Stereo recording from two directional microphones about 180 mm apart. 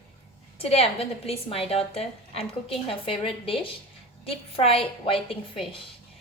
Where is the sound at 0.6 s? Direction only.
35° left (ahead or behind).